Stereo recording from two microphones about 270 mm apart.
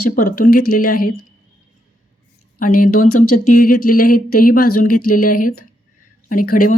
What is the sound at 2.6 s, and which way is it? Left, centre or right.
Speech, left.